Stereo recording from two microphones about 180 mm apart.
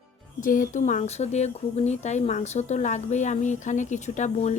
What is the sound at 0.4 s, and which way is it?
Speech, 45° left (ahead or behind).